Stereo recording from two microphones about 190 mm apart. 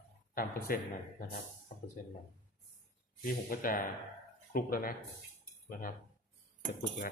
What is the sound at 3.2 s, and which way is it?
A man's voice, 50° left (ahead or behind).